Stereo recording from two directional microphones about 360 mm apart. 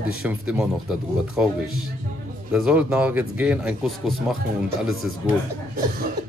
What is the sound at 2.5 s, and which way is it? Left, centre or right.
Speech, centre.